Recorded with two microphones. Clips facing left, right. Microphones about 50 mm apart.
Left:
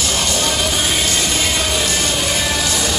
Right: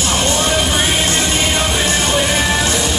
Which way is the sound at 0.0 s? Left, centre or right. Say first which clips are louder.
Right 3 dB; right.